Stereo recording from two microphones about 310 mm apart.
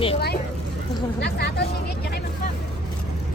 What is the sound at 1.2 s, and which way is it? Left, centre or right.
Speech, left.